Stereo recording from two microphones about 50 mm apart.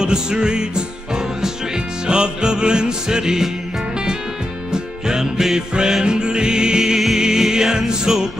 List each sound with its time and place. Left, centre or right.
0.0 s music: centre
4.7 s music: centre